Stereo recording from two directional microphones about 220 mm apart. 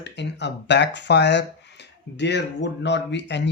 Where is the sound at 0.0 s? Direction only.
50° left (ahead or behind).